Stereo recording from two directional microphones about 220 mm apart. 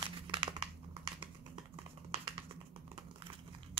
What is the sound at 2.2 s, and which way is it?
Crumpling, 20° right (ahead or behind).